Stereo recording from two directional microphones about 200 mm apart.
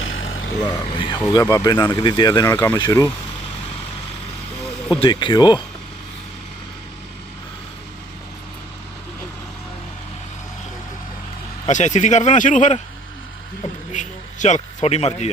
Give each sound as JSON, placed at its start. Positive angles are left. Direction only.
{"t": 0.0, "sound": "a sound", "side_deg": 80}
{"t": 0.9, "sound": "speech", "side_deg": 25}
{"t": 4.9, "sound": "speech", "side_deg": 25}
{"t": 11.6, "sound": "speech", "side_deg": 35}
{"t": 13.9, "sound": "a man's voice", "side_deg": 40}